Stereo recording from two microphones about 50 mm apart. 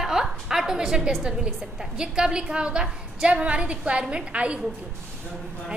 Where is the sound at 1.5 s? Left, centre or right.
Centre.